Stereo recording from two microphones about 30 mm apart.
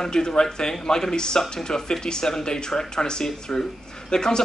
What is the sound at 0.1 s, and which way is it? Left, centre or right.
Speech, left.